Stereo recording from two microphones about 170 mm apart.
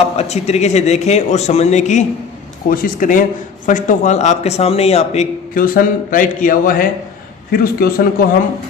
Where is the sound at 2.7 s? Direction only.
55° left (ahead or behind); by 5.2 s 40° left (ahead or behind).